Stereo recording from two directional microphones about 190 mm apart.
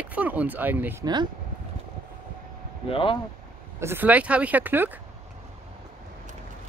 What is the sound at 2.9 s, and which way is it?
Speech, 25° left (ahead or behind).